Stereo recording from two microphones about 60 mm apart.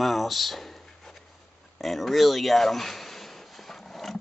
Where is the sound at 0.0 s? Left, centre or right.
Centre.